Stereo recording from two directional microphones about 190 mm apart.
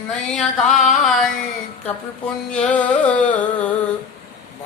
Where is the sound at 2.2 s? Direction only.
5° left (ahead or behind).